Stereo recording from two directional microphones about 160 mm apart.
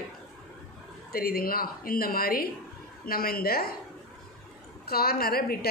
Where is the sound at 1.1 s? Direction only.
70° left (ahead or behind).